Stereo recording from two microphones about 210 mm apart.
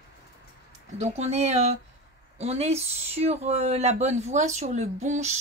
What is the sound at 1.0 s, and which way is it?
Speech, 30° right (ahead or behind).